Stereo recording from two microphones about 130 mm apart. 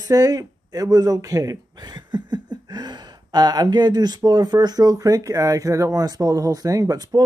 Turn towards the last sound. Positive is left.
turn(degrees=-30)  # may be behind; listen again after turning